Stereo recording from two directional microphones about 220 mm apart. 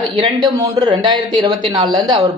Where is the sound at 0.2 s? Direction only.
20° right (ahead or behind).